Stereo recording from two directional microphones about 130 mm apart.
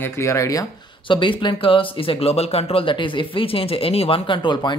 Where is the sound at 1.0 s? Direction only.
40° left (ahead or behind).